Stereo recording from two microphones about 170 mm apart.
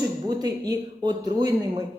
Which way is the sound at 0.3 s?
25° right (ahead or behind).